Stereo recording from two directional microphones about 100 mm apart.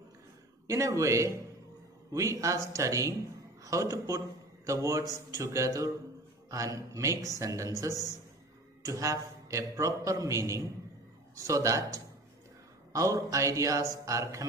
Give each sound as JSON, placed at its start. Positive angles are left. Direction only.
{"t": 0.7, "sound": "a man's voice", "side_deg": -30}
{"t": 8.8, "sound": "a man's voice", "side_deg": -35}